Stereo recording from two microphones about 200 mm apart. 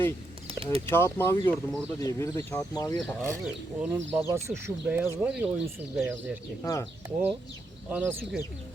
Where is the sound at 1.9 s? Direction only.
15° left (ahead or behind).